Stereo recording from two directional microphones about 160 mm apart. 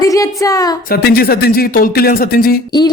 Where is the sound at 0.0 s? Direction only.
20° left (ahead or behind).